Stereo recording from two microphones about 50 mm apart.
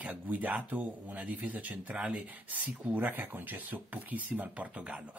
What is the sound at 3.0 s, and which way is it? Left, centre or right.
Speech, right.